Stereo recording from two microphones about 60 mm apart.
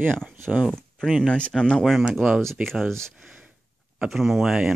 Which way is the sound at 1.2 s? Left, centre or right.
Centre.